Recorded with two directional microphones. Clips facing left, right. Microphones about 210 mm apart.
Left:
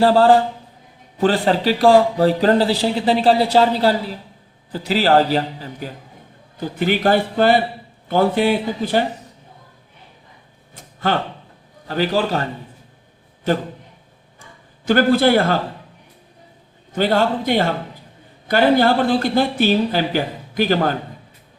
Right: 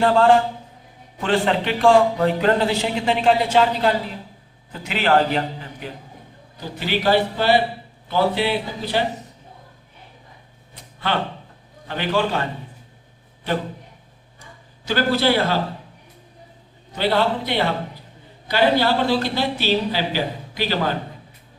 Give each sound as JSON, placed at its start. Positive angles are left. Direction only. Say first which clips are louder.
{"t": 0.0, "sound": "a man's voice", "louder": "left 3 dB", "side_deg": 35}
{"t": 6.7, "sound": "speech", "louder": "left 2 dB", "side_deg": 50}
{"t": 10.8, "sound": "a sound", "louder": "left 4 dB", "side_deg": 45}
{"t": 11.9, "sound": "a man's voice", "louder": "left 3 dB", "side_deg": 40}
{"t": 14.8, "sound": "speech", "louder": "left 5 dB", "side_deg": 50}
{"t": 16.9, "sound": "speech", "louder": "left 3 dB", "side_deg": 45}